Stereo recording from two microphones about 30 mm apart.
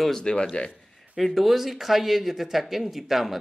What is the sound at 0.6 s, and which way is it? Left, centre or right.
Speech, left.